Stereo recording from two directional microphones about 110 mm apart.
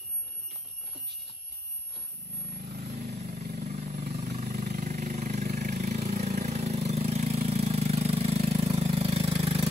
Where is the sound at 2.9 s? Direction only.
75° right (ahead or behind).